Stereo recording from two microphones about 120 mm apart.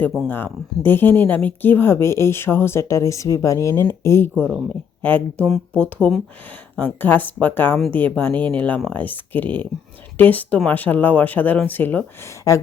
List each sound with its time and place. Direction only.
0.3 s speech: 15° left (ahead or behind)
12.3 s speech: 25° left (ahead or behind)